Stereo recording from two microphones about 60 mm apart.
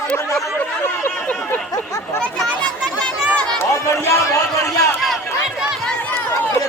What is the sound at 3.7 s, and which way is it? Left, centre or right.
A man's voice, left.